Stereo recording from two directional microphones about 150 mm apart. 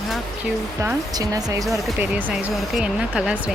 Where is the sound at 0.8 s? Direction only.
20° right (ahead or behind).